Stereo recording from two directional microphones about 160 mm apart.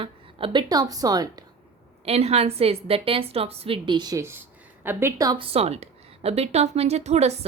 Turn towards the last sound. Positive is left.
turn(degrees=-45)  # may be behind; listen again after turning